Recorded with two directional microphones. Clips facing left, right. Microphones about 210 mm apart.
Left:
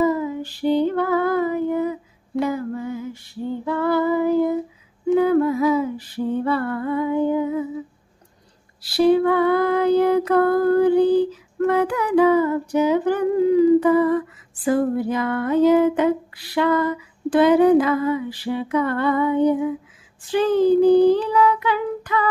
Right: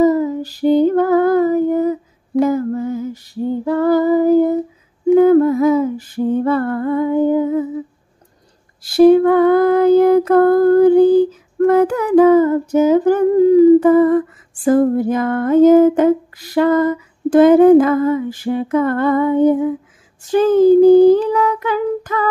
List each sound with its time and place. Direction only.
0.0 s female singing: 40° right (ahead or behind)
5.1 s a sound: 45° right (ahead or behind)
8.8 s female singing: 45° right (ahead or behind)